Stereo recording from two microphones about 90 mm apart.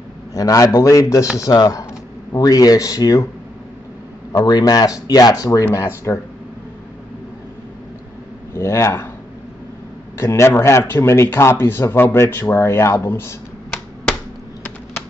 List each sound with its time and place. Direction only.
0.3 s a man's voice: 40° left (ahead or behind)
4.4 s speech: 50° left (ahead or behind); by 6.1 s 35° left (ahead or behind)
8.5 s speech: 30° left (ahead or behind)
10.1 s speech: 30° left (ahead or behind)